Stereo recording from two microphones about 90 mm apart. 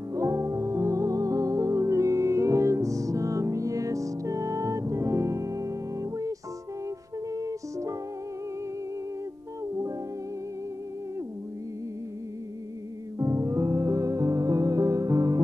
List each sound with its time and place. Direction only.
0.1 s music: 35° right (ahead or behind)
7.3 s music: 35° right (ahead or behind)
13.2 s music: 35° right (ahead or behind)